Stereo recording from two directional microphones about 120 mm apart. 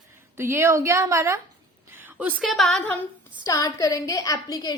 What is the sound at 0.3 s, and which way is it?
A woman's voice, 20° right (ahead or behind).